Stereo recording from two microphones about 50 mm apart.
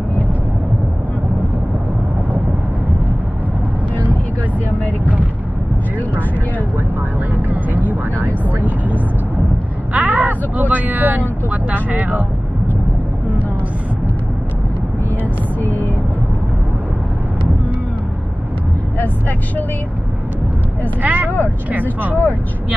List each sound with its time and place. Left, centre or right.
7.3 s vehicle: right
8.5 s a sound: right
9.9 s vehicle: right
21.0 s vehicle: right